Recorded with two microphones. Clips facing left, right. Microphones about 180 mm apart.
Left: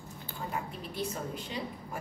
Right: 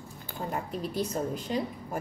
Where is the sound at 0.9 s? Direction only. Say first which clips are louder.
Right 4 dB; 40° right (ahead or behind).